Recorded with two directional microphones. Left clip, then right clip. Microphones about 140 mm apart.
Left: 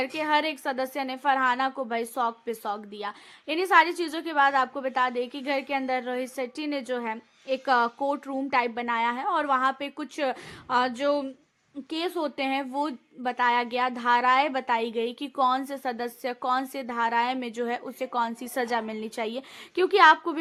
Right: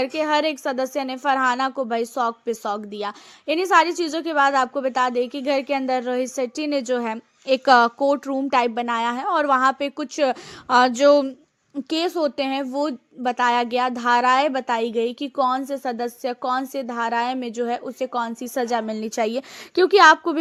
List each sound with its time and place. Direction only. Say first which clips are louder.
0.0 s a woman's voice: right 5 dB; 35° right (ahead or behind)
10.7 s speech: right 10 dB; 45° right (ahead or behind)
12.1 s a woman's voice: right 5 dB; 30° right (ahead or behind)